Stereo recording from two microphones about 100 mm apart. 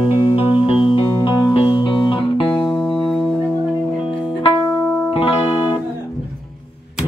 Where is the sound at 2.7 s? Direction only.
15° left (ahead or behind).